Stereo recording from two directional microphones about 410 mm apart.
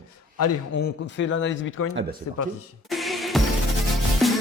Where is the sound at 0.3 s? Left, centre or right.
Left.